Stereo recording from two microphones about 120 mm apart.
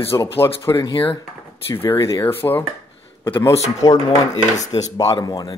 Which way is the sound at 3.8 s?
35° left (ahead or behind).